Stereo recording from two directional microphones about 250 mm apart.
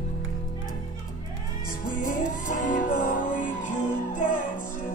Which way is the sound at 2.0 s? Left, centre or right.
Left.